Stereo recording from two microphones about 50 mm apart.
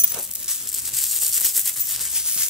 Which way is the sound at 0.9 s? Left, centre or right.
Centre.